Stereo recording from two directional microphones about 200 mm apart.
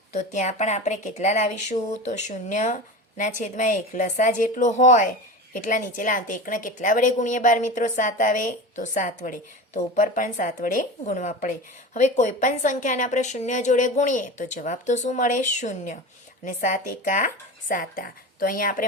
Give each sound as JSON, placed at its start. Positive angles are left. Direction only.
{"t": 0.1, "sound": "a woman's voice", "side_deg": 35}